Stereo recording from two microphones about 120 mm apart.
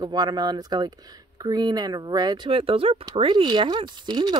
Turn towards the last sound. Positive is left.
turn(degrees=-40)  # may be behind; listen again after turning